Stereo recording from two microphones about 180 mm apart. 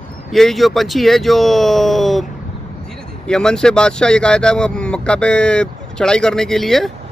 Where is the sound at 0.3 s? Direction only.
Centre (ahead or behind).